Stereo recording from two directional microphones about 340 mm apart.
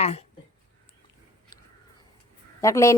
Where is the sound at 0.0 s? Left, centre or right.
Centre.